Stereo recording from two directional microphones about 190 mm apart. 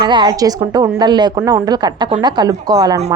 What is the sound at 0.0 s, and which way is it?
A woman's voice, 25° right (ahead or behind).